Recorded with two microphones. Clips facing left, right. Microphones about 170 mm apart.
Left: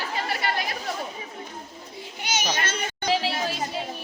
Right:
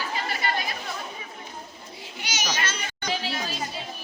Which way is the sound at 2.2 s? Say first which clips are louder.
Left 3 dB; 55° left (ahead or behind).